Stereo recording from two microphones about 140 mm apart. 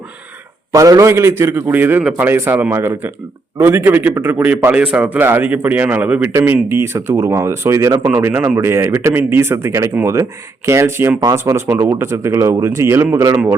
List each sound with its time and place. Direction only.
0.7 s a man's voice: 25° right (ahead or behind)